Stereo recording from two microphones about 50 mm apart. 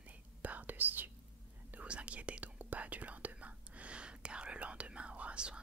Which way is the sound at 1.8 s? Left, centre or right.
Right.